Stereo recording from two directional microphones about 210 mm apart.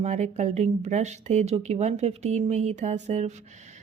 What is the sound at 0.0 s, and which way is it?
A woman's voice, 35° right (ahead or behind).